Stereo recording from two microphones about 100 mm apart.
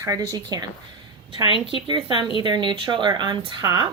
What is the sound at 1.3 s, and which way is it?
A woman's voice, 55° right (ahead or behind).